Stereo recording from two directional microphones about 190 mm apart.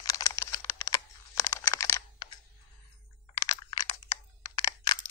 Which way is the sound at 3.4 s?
20° left (ahead or behind).